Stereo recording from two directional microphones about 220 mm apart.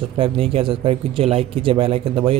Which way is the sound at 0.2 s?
25° right (ahead or behind).